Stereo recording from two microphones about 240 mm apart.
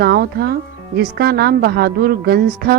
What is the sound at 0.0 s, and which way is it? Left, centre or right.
A woman's voice, right.